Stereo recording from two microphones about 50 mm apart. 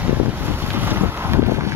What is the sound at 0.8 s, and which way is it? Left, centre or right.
Boat, right.